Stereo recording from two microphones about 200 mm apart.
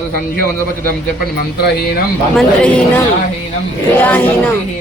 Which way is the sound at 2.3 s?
5° left (ahead or behind).